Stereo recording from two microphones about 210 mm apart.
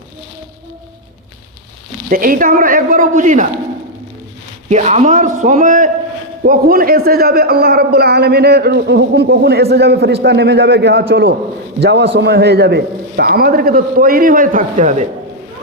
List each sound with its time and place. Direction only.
2.0 s speech: 40° right (ahead or behind)
4.7 s a man's voice: 35° right (ahead or behind)